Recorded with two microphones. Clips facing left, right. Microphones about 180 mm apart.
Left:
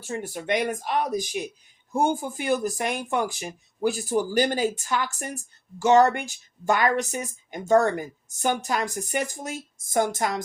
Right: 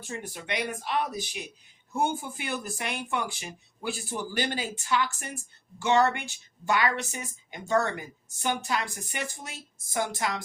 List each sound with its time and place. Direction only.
0.3 s a woman's voice: 45° left (ahead or behind)